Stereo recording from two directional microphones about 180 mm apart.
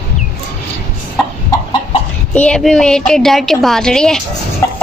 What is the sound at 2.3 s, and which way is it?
A woman's voice, 5° left (ahead or behind).